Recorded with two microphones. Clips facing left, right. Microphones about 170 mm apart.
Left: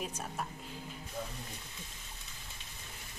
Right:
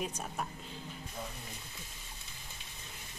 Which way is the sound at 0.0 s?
Centre (ahead or behind).